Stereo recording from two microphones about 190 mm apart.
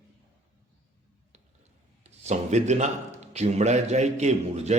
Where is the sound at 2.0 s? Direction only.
35° right (ahead or behind).